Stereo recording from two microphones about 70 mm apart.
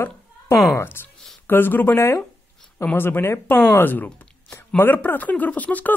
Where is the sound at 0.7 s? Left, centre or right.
Left.